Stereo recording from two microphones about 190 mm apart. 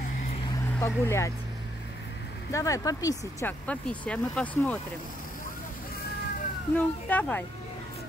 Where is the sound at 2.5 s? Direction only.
15° left (ahead or behind).